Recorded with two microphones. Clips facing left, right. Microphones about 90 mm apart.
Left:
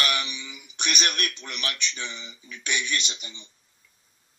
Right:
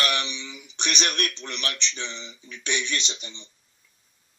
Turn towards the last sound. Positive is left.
turn(degrees=10)  # may be behind; listen again after turning